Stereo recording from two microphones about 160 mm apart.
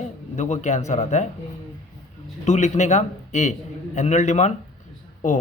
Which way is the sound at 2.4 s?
45° left (ahead or behind).